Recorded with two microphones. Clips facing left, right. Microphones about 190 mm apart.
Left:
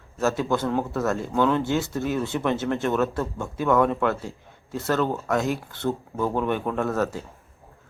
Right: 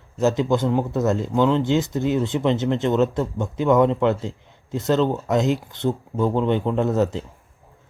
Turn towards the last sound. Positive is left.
turn(degrees=-20)  # may be behind; listen again after turning